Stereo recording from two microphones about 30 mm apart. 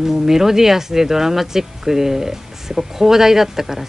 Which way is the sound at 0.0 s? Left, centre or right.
Centre.